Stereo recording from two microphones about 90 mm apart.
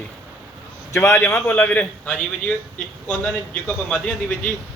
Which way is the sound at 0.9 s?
35° left (ahead or behind).